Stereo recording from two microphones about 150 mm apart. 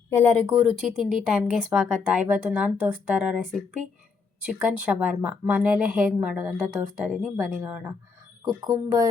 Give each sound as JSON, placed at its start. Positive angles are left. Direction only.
{"t": 0.1, "sound": "speech", "side_deg": 10}
{"t": 0.6, "sound": "speech", "side_deg": -5}
{"t": 4.6, "sound": "speech", "side_deg": -5}
{"t": 8.4, "sound": "speech", "side_deg": -25}